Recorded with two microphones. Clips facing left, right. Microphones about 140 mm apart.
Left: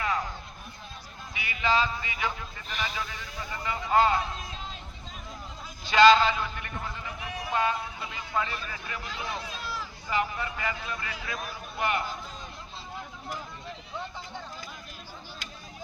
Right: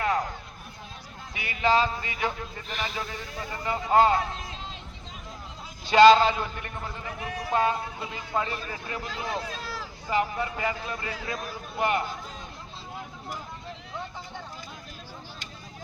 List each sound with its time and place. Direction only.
1.3 s speech: 45° right (ahead or behind)
2.6 s speech: centre (ahead or behind)
3.0 s a man's voice: 30° right (ahead or behind)
5.9 s a man's voice: 30° right (ahead or behind)